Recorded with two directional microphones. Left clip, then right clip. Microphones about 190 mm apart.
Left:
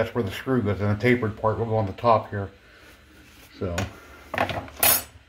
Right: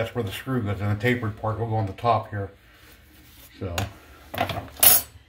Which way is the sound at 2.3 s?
20° left (ahead or behind).